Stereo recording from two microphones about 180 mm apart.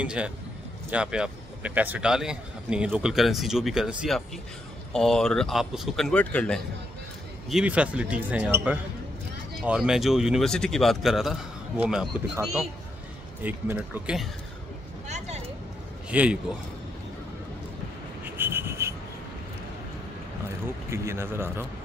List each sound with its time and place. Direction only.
0.0 s a man's voice: 5° right (ahead or behind)
7.4 s a man's voice: 5° right (ahead or behind)
13.4 s speech: 10° right (ahead or behind)
15.0 s a sound: 40° right (ahead or behind)
16.1 s a man's voice: 5° right (ahead or behind)
18.2 s rub: 10° right (ahead or behind)
20.6 s speech: 15° right (ahead or behind)